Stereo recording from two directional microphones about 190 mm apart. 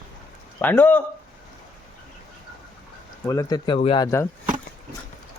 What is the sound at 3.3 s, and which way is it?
Speech, 20° left (ahead or behind).